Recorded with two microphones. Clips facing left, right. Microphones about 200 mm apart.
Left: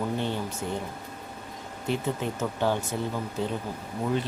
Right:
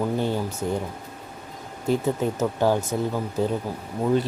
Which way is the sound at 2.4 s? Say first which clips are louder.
Right 4 dB; 40° right (ahead or behind).